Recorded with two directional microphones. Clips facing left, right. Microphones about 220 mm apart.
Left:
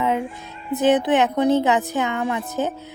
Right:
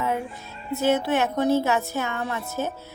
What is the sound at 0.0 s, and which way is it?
Music, 20° left (ahead or behind).